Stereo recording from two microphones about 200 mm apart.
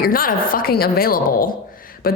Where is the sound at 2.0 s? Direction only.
50° left (ahead or behind).